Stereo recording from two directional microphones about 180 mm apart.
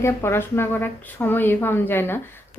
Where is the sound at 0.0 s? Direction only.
15° left (ahead or behind).